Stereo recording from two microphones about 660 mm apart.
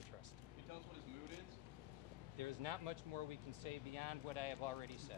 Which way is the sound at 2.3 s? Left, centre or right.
Right.